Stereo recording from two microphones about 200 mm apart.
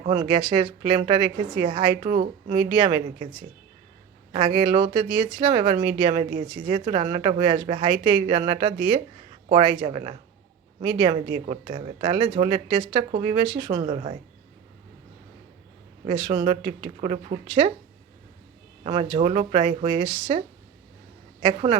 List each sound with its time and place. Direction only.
0.1 s speech: 20° right (ahead or behind)
4.3 s a woman's voice: 25° right (ahead or behind)
16.0 s speech: 25° right (ahead or behind)
18.8 s speech: 30° right (ahead or behind)
21.4 s speech: 25° right (ahead or behind)